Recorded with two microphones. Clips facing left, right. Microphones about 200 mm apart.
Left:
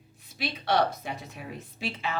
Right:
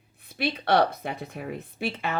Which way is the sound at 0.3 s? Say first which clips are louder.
Right 4 dB; 60° right (ahead or behind).